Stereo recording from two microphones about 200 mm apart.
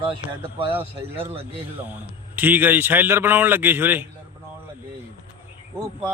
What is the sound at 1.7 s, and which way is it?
A man's voice, 10° right (ahead or behind).